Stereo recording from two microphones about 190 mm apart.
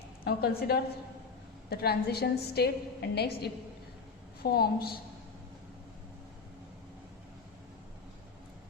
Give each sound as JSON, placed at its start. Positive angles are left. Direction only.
{"t": 0.3, "sound": "a woman's voice", "side_deg": 55}